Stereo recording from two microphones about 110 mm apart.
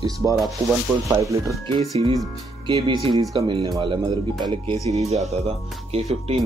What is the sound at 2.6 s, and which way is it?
Speech, 45° right (ahead or behind).